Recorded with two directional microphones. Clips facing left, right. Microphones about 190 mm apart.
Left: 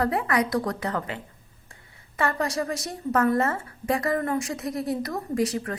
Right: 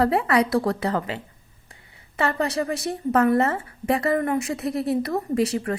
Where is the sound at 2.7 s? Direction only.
60° right (ahead or behind).